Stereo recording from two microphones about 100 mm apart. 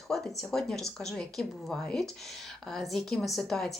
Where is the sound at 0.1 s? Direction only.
Centre (ahead or behind).